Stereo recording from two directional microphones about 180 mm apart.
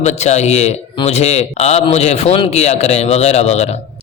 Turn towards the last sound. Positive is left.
turn(degrees=35)  # may be behind; listen again after turning